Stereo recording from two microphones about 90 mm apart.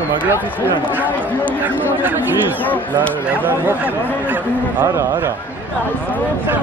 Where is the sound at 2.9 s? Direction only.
20° right (ahead or behind).